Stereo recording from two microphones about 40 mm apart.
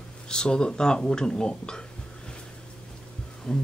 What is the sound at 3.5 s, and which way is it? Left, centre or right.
Speech, centre.